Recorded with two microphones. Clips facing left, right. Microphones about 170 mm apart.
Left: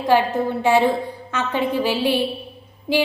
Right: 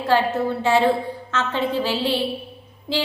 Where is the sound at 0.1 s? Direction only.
15° left (ahead or behind).